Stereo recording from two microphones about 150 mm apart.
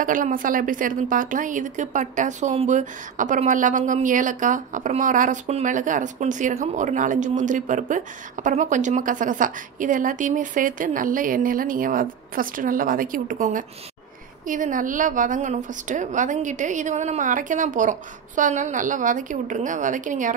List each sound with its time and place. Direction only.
0.0 s a woman's voice: 65° right (ahead or behind)